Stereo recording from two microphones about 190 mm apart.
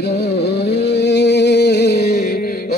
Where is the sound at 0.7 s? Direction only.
60° left (ahead or behind).